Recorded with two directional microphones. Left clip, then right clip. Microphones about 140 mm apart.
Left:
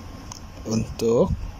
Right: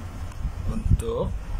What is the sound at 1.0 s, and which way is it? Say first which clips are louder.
Speech: left 9 dB; 70° left (ahead or behind).